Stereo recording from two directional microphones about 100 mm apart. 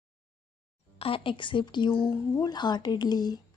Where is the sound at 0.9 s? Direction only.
70° left (ahead or behind).